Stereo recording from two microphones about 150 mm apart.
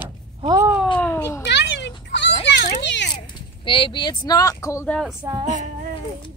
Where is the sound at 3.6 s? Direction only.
35° left (ahead or behind).